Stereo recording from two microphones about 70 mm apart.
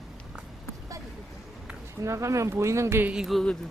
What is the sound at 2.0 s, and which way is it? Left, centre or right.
Speech, right.